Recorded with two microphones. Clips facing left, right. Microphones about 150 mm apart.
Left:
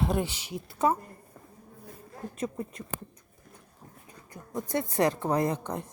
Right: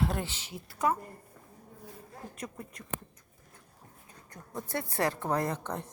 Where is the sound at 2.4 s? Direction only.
25° left (ahead or behind).